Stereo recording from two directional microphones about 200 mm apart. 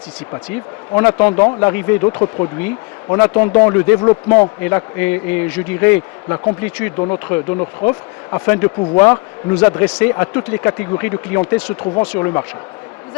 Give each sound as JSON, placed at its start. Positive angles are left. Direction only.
{"t": 0.5, "sound": "speech", "side_deg": 10}
{"t": 2.6, "sound": "speech", "side_deg": 10}